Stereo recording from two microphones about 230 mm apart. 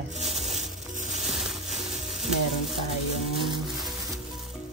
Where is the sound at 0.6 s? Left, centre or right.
Right.